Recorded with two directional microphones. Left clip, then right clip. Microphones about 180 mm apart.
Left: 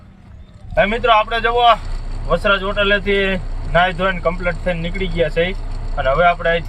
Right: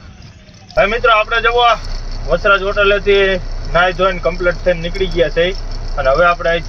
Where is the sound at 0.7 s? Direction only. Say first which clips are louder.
Right 2 dB; 5° left (ahead or behind).